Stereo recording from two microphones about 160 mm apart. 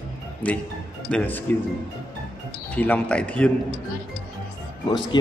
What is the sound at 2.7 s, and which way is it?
Speech, 10° left (ahead or behind).